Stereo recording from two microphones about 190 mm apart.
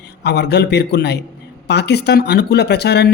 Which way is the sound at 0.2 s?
60° left (ahead or behind).